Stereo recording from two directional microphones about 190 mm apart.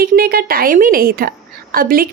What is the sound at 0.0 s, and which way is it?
A woman's voice, 50° right (ahead or behind).